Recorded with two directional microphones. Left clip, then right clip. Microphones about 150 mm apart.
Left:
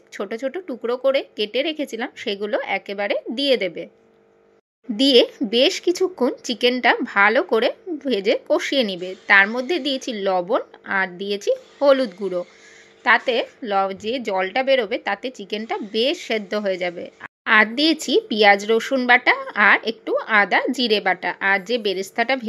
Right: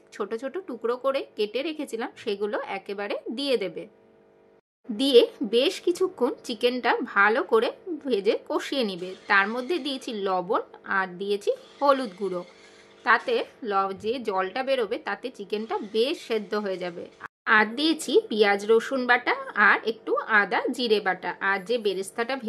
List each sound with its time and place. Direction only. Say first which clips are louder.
0.1 s speech: left 5 dB; 10° left (ahead or behind)
4.9 s a woman's voice: left 4 dB; 20° left (ahead or behind)